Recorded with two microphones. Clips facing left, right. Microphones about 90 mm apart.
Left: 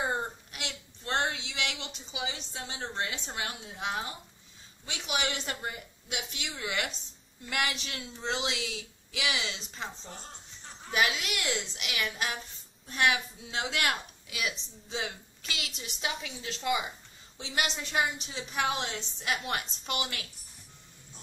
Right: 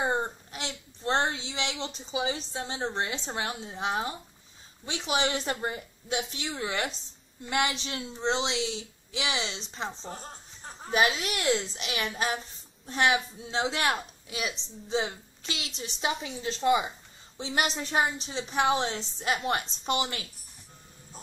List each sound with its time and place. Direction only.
0.0 s a child's voice: 25° right (ahead or behind)